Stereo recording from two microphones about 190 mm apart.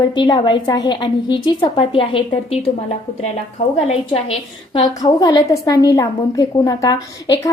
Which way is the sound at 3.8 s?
30° left (ahead or behind).